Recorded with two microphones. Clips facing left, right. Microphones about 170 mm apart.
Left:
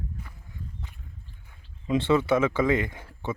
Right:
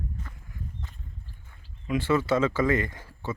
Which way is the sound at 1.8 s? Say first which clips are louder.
Left 2 dB; 25° left (ahead or behind).